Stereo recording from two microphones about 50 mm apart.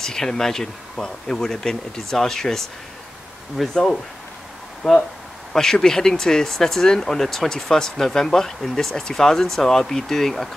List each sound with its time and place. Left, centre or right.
0.0 s speech: centre
3.7 s speech: centre